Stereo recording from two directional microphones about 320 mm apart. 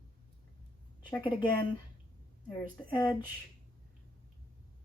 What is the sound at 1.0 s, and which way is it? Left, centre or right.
Speech, centre.